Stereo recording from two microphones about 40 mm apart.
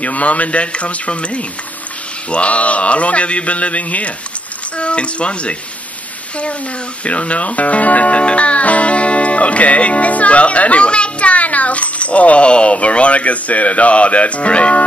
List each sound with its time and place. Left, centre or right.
0.0 s a man's voice: left
7.1 s speech: left